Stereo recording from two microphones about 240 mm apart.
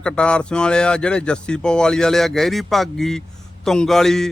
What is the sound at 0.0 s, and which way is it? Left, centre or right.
Speech, centre.